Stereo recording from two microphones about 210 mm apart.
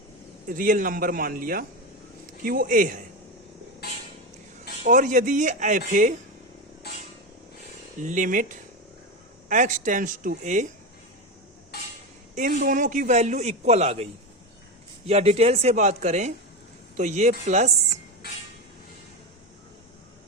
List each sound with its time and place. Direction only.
0.4 s a man's voice: 40° right (ahead or behind)
4.9 s a man's voice: 35° right (ahead or behind)
8.0 s a man's voice: 35° right (ahead or behind)
12.3 s a man's voice: 35° right (ahead or behind)